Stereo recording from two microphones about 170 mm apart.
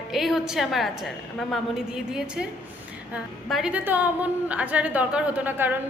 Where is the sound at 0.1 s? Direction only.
Centre (ahead or behind).